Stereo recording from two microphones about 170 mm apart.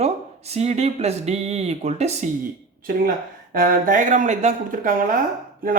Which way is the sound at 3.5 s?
55° right (ahead or behind).